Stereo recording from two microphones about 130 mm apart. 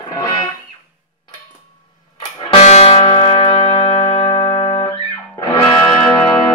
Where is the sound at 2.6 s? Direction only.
55° left (ahead or behind).